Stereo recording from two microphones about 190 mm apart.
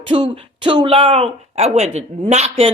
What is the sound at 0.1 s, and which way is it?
A woman's voice, 25° right (ahead or behind).